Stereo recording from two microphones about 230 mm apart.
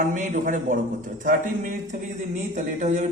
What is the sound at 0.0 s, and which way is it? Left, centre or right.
A man's voice, right.